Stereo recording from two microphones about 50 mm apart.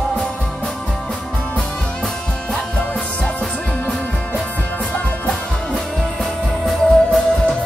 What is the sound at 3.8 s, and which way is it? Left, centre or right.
Music, left.